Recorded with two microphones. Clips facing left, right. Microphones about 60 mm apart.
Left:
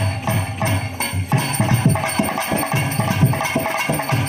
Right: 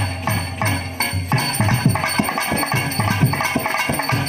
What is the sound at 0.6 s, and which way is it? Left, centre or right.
Music, right.